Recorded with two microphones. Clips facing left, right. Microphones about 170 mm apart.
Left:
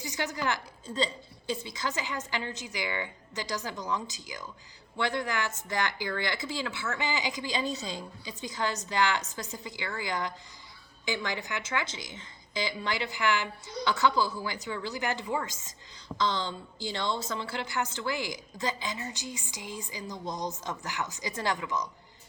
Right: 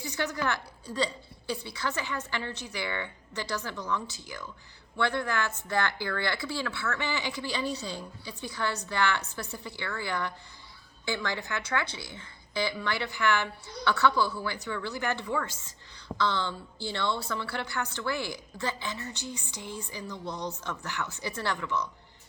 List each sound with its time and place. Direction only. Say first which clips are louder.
0.0 s a woman's voice: right 1 dB; 15° left (ahead or behind)